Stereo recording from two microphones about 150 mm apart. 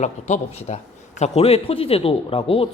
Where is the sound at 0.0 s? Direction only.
50° left (ahead or behind).